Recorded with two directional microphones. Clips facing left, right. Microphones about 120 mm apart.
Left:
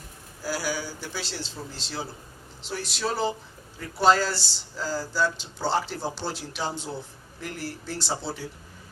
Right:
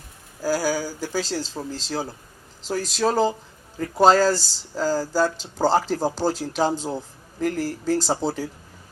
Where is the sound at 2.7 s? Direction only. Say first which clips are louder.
Right 7 dB; 40° right (ahead or behind).